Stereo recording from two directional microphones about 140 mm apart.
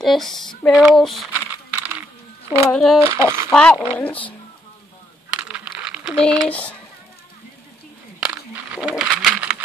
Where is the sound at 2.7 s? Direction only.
5° left (ahead or behind).